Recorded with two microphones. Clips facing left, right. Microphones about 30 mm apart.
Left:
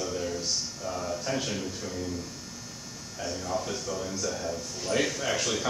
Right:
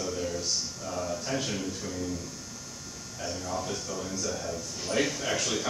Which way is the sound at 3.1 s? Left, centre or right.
Centre.